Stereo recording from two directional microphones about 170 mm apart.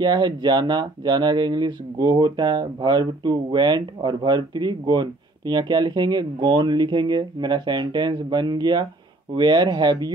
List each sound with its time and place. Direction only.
0.0 s speech: 25° right (ahead or behind)